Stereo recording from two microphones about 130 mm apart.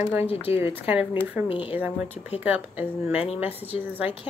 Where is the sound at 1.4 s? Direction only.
45° left (ahead or behind).